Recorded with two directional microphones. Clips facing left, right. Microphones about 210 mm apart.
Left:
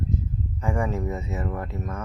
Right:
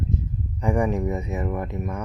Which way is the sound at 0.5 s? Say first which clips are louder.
Right 5 dB; 15° right (ahead or behind).